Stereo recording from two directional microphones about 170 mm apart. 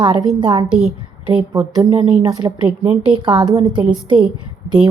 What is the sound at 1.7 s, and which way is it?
A woman's voice, 25° right (ahead or behind).